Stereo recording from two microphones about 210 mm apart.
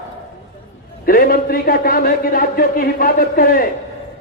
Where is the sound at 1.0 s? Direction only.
45° left (ahead or behind).